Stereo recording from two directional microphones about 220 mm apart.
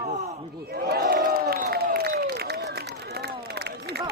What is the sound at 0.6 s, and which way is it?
Crowd, 45° right (ahead or behind).